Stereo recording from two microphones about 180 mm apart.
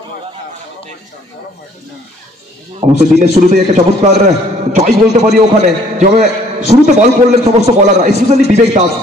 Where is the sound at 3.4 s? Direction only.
25° right (ahead or behind).